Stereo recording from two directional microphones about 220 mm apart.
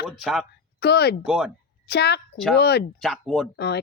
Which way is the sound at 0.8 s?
50° left (ahead or behind).